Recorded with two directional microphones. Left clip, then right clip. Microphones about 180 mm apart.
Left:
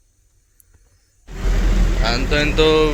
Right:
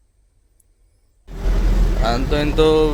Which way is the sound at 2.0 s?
25° right (ahead or behind).